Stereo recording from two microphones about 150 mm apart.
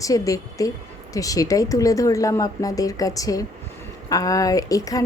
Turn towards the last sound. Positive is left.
turn(degrees=25)  # may be behind; listen again after turning